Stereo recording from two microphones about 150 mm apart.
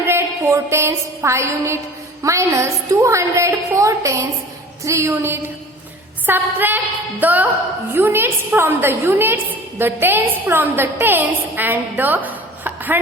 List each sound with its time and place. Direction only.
0.0 s music: 15° right (ahead or behind)
2.2 s a woman's voice: 20° right (ahead or behind)
6.2 s music: 15° right (ahead or behind)
7.9 s a woman's voice: 15° right (ahead or behind)